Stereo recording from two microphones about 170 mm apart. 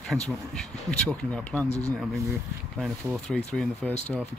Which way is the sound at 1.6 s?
40° left (ahead or behind).